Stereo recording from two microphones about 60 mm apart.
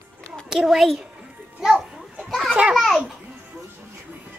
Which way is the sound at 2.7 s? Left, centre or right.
Centre.